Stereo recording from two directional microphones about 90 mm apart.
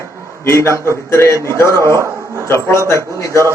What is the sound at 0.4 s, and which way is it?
A man's voice, 30° left (ahead or behind).